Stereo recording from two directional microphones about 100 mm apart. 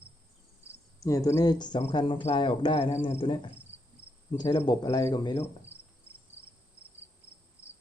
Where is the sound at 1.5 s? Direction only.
45° left (ahead or behind).